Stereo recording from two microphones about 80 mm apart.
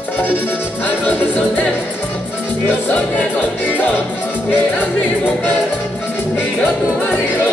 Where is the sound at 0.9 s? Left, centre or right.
Centre.